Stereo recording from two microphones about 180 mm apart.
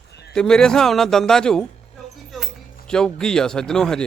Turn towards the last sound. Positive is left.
turn(degrees=5)  # may be behind; listen again after turning